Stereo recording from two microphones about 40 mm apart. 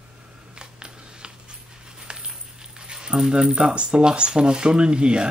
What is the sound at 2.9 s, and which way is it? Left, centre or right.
Speech, right.